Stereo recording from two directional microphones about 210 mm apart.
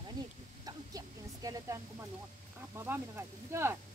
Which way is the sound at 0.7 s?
15° right (ahead or behind).